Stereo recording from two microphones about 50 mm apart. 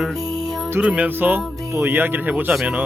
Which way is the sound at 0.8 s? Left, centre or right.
Right.